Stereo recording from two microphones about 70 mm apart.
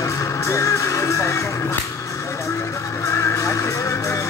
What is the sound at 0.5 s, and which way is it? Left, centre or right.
Music, left.